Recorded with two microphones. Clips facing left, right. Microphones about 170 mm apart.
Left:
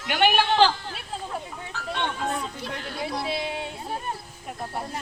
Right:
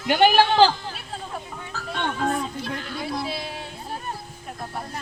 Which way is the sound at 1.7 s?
40° right (ahead or behind).